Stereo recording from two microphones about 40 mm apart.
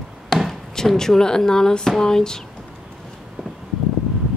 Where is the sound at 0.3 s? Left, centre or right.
Centre.